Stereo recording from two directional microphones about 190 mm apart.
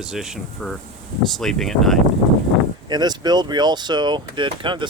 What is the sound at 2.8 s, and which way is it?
Speech, 20° right (ahead or behind).